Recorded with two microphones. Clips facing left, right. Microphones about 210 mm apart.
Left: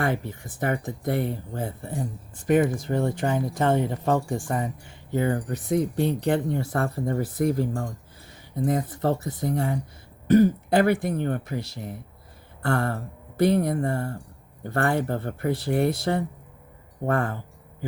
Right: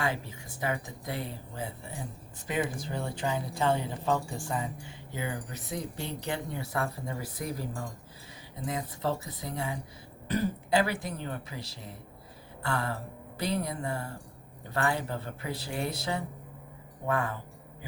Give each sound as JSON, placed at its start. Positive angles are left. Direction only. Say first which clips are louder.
{"t": 0.0, "sound": "speech", "louder": "left 6 dB", "side_deg": 55}